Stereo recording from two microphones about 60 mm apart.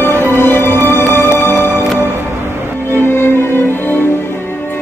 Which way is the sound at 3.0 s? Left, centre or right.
Left.